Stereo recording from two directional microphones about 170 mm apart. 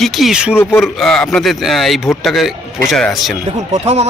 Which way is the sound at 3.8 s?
40° right (ahead or behind).